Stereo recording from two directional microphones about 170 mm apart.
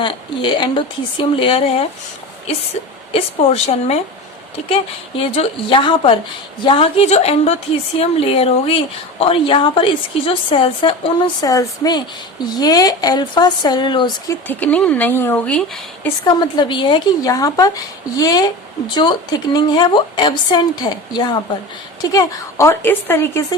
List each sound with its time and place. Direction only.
0.0 s speech: 30° left (ahead or behind)
3.1 s a woman's voice: 35° left (ahead or behind)
14.4 s speech: 10° left (ahead or behind)
16.2 s speech: 25° left (ahead or behind)